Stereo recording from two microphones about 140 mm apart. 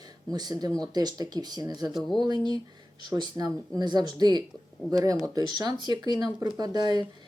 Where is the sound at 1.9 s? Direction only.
Centre (ahead or behind).